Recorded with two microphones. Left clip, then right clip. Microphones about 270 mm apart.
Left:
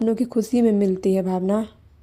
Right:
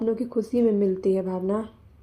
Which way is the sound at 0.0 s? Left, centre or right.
Left.